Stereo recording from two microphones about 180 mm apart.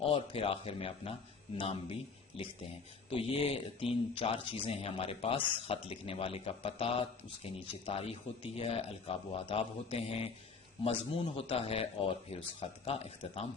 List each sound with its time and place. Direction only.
0.0 s speech: 30° left (ahead or behind)
3.1 s speech: 30° left (ahead or behind)